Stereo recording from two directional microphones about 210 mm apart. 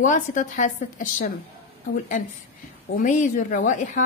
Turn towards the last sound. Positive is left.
turn(degrees=35)  # may be behind; listen again after turning